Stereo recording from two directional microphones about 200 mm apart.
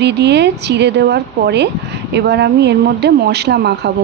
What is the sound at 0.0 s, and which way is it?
A woman's voice, 60° right (ahead or behind).